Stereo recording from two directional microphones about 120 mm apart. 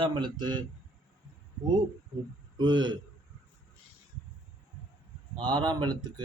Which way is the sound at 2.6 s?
40° right (ahead or behind).